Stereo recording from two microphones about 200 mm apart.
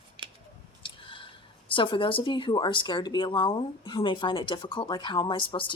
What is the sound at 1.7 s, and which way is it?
Speech, 25° left (ahead or behind).